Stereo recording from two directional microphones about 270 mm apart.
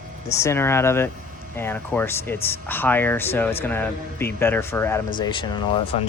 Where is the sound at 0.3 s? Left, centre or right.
Centre.